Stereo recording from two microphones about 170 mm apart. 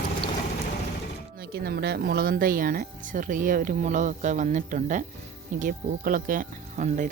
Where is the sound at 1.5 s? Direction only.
70° right (ahead or behind).